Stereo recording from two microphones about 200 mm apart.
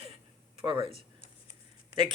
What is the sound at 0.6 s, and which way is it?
Speech, 25° right (ahead or behind).